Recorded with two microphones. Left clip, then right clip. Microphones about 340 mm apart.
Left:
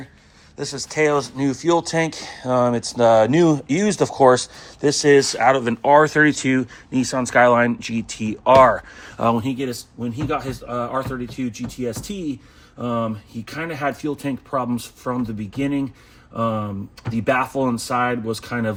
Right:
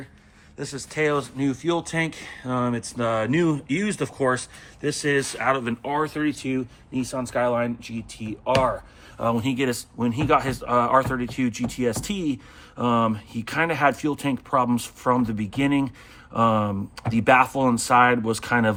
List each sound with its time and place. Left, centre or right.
0.5 s speech: centre
9.4 s speech: centre